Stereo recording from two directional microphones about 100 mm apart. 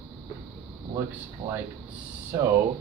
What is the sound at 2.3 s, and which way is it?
Speech, 25° right (ahead or behind).